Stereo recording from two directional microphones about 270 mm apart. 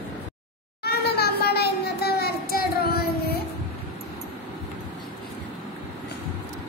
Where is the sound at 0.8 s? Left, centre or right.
Left.